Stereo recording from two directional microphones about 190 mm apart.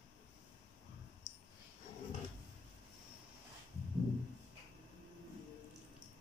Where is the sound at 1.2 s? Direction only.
20° right (ahead or behind).